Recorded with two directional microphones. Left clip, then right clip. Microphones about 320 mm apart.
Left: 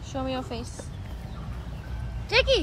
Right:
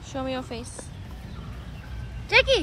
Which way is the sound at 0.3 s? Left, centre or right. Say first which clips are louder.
Even; left.